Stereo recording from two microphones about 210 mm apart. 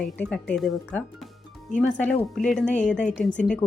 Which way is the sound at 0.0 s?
5° left (ahead or behind).